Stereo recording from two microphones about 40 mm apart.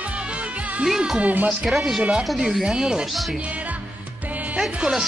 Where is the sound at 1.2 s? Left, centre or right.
Right.